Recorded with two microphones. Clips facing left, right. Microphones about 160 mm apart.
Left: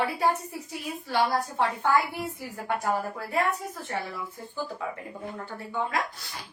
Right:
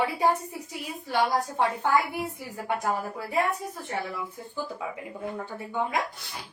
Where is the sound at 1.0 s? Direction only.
15° right (ahead or behind).